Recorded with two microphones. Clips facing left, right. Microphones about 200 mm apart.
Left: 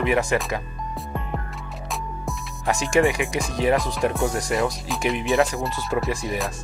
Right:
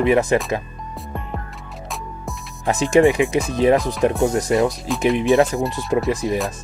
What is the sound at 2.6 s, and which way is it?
Speech, 20° right (ahead or behind).